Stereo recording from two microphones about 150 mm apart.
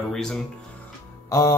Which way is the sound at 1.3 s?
20° left (ahead or behind).